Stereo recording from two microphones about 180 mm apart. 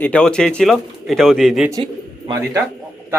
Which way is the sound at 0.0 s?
5° left (ahead or behind).